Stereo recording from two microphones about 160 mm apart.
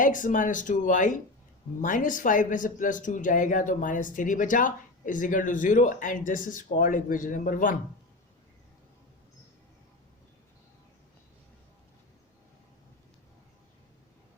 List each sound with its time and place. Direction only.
0.0 s speech: 55° left (ahead or behind)